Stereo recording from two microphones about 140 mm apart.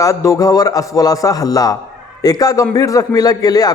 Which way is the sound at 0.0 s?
20° left (ahead or behind).